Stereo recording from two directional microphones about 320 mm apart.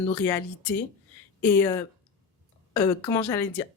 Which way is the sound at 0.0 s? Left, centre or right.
Centre.